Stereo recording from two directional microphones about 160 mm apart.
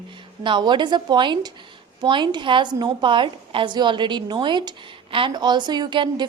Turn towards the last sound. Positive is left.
turn(degrees=-30)  # may be behind; listen again after turning